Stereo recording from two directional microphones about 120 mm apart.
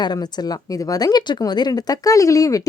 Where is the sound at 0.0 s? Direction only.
35° left (ahead or behind).